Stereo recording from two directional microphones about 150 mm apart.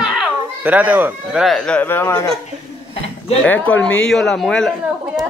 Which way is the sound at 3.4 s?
10° left (ahead or behind).